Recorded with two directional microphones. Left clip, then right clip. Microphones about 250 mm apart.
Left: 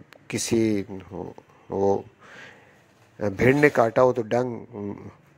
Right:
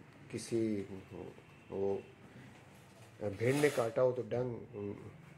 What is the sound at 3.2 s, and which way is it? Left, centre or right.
Speech, left.